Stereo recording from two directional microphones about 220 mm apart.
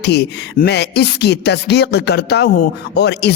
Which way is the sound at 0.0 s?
50° left (ahead or behind).